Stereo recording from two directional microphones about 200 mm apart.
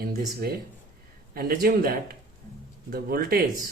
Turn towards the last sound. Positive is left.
turn(degrees=-50)  # may be behind; listen again after turning